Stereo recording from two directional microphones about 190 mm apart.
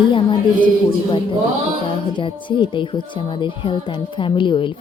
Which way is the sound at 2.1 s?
25° left (ahead or behind).